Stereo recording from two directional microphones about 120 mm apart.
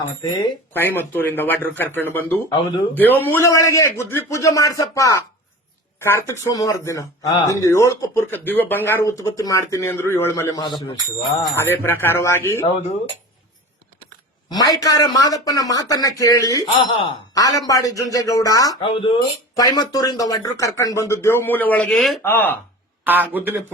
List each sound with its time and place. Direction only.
0.7 s speech: 15° left (ahead or behind)
2.5 s speech: 40° left (ahead or behind)
2.9 s speech: 15° left (ahead or behind)
11.5 s speech: 20° left (ahead or behind)
14.5 s speech: 30° left (ahead or behind)
16.8 s speech: 45° left (ahead or behind)
17.3 s speech: 30° left (ahead or behind)
18.8 s speech: 45° left (ahead or behind)
19.5 s speech: 30° left (ahead or behind); by 21.9 s 15° left (ahead or behind)
21.9 s speech: centre (ahead or behind)
22.2 s speech: 15° left (ahead or behind)
23.0 s speech: 15° right (ahead or behind)